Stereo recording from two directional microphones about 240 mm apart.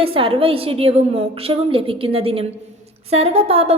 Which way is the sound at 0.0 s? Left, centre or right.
Right.